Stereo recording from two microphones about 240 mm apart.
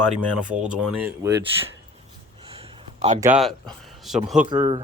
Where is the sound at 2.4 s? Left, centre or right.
Right.